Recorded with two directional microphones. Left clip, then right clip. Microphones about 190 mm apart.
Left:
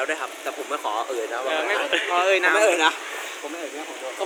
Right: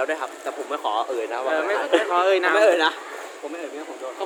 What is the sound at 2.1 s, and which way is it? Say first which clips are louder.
Speech: left 2 dB; 60° right (ahead or behind).